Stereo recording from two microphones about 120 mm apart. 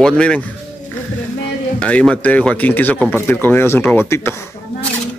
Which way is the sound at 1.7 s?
10° left (ahead or behind).